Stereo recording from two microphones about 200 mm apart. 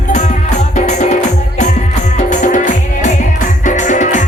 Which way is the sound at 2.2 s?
40° left (ahead or behind).